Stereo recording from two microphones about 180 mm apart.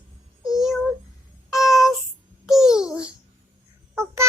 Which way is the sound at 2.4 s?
5° right (ahead or behind).